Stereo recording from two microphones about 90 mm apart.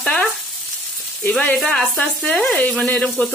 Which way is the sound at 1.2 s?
15° left (ahead or behind).